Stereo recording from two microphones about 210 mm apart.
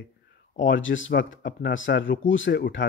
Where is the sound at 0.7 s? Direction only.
65° left (ahead or behind).